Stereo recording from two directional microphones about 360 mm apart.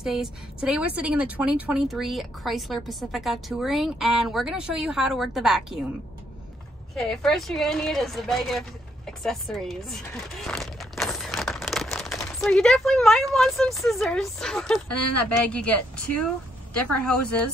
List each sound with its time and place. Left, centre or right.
0.0 s a woman's voice: centre
7.0 s a woman's voice: centre
10.4 s a sound: centre
15.2 s a woman's voice: centre